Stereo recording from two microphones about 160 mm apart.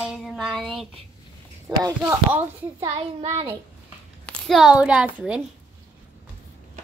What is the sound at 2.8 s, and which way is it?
Speech, 35° right (ahead or behind).